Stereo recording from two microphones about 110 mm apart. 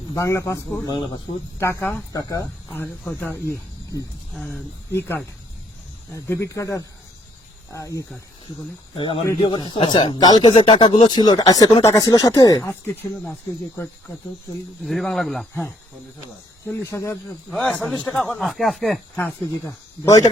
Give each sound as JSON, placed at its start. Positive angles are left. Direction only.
{"t": 0.1, "sound": "speech", "side_deg": 30}
{"t": 0.9, "sound": "speech", "side_deg": 45}
{"t": 1.5, "sound": "speech", "side_deg": 25}
{"t": 2.1, "sound": "speech", "side_deg": 30}
{"t": 3.2, "sound": "speech", "side_deg": 20}
{"t": 4.9, "sound": "speech", "side_deg": 25}
{"t": 9.0, "sound": "speech", "side_deg": 50}
{"t": 12.6, "sound": "speech", "side_deg": 20}
{"t": 14.8, "sound": "speech", "side_deg": 0}
{"t": 16.8, "sound": "speech", "side_deg": 25}
{"t": 17.5, "sound": "speech", "side_deg": 10}
{"t": 18.3, "sound": "speech", "side_deg": 0}
{"t": 19.1, "sound": "speech", "side_deg": 20}